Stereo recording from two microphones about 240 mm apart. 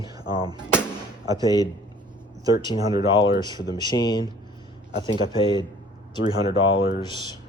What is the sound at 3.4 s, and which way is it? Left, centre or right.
Speech, centre.